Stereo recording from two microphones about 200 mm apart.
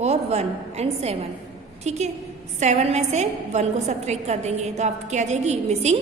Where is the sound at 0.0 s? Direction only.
30° right (ahead or behind).